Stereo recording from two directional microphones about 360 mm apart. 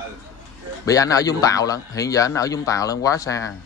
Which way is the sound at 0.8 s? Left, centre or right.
Centre.